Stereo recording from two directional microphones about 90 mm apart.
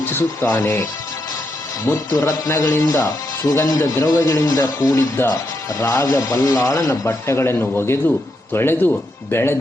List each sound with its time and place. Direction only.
0.0 s speech: 25° left (ahead or behind)
4.4 s speech: 40° left (ahead or behind); by 9.6 s 25° left (ahead or behind)